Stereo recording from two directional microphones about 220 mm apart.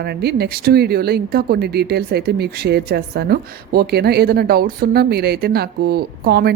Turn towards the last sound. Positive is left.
turn(degrees=-45)  # may be behind; listen again after turning